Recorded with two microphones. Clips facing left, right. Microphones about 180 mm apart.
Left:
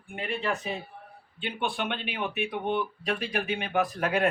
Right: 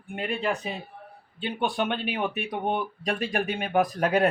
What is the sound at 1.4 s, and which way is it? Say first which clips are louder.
Speech: right 4 dB; 40° right (ahead or behind).